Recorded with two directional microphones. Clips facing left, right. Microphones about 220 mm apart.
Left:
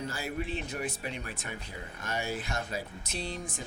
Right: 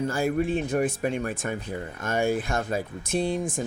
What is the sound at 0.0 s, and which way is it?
Speech, 50° right (ahead or behind).